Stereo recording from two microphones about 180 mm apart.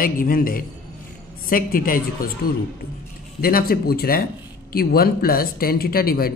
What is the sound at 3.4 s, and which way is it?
Speech, 55° left (ahead or behind).